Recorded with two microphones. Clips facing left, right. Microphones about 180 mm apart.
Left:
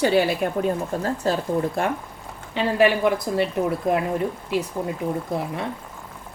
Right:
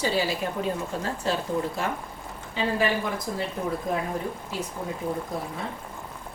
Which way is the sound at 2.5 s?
70° left (ahead or behind).